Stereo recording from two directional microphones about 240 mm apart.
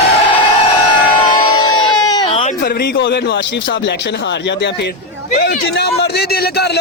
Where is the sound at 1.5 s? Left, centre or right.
Centre.